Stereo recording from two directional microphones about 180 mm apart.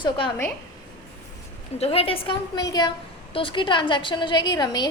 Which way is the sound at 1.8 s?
30° left (ahead or behind).